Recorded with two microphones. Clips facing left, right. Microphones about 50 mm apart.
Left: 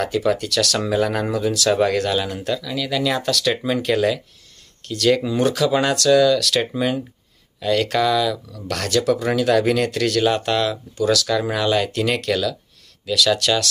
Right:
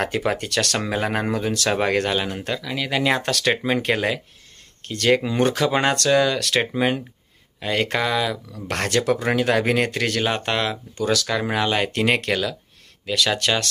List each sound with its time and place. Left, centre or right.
0.0 s speech: right